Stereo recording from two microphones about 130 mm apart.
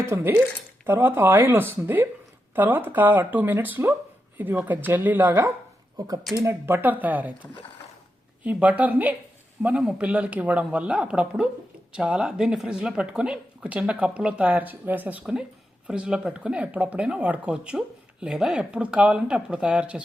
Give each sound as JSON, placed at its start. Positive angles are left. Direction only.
{"t": 0.0, "sound": "speech", "side_deg": -20}
{"t": 6.0, "sound": "speech", "side_deg": -30}
{"t": 8.4, "sound": "speech", "side_deg": -10}